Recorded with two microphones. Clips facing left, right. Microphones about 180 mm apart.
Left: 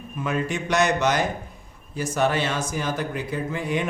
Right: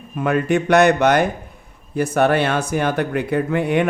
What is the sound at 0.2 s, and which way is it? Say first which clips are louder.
Speech: right 8 dB; 60° right (ahead or behind).